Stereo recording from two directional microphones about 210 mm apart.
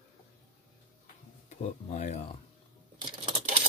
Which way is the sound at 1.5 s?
30° left (ahead or behind).